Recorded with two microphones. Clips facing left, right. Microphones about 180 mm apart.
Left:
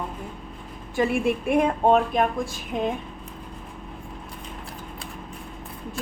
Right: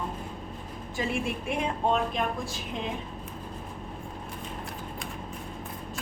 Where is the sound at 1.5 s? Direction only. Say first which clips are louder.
Left 8 dB; 55° left (ahead or behind).